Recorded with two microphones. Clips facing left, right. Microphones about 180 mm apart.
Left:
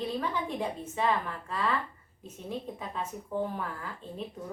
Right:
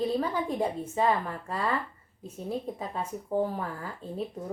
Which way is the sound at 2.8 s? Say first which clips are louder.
Right 3 dB; 35° right (ahead or behind).